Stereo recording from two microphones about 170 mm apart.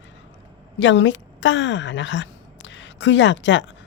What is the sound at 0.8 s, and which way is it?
A woman's voice, 90° left.